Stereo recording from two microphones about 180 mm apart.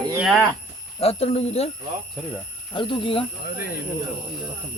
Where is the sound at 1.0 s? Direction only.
35° left (ahead or behind).